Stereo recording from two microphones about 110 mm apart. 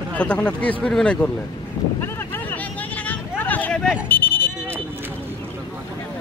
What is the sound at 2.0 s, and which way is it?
Vehicle, 20° left (ahead or behind).